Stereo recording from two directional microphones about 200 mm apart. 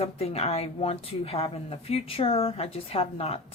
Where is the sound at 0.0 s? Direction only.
30° left (ahead or behind).